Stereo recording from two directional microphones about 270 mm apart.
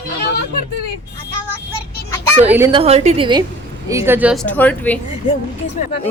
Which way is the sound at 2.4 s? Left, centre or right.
Centre.